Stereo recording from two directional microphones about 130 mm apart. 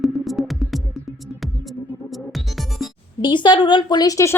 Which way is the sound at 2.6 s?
Centre (ahead or behind).